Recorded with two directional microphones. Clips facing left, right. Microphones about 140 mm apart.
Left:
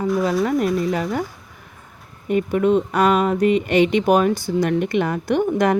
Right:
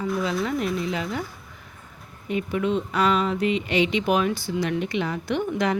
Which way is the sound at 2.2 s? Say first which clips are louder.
Left 7 dB; 50° left (ahead or behind).